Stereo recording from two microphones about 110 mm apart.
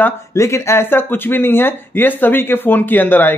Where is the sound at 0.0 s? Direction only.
25° left (ahead or behind).